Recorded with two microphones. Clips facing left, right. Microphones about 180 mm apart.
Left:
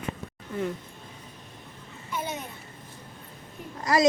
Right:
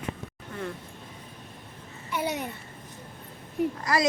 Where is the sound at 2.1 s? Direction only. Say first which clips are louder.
Right 4 dB; 70° right (ahead or behind).